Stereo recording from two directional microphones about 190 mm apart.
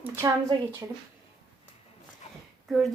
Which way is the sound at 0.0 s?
15° right (ahead or behind).